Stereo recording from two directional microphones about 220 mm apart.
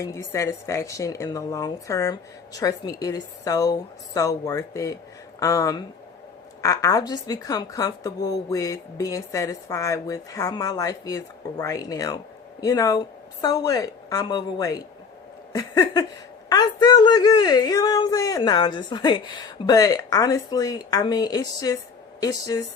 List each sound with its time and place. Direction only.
0.0 s a woman's voice: 15° left (ahead or behind)